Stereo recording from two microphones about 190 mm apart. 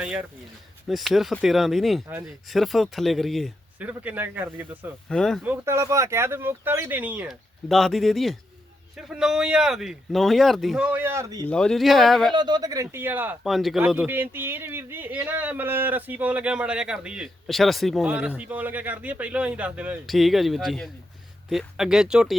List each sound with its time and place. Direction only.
0.0 s speech: 5° right (ahead or behind)
5.0 s speech: 5° left (ahead or behind)
5.4 s speech: 10° right (ahead or behind)
11.4 s speech: 5° left (ahead or behind)
12.3 s speech: 20° right (ahead or behind); by 22.4 s 5° right (ahead or behind)